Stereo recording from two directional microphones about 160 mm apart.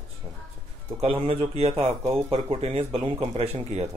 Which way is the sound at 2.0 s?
20° right (ahead or behind).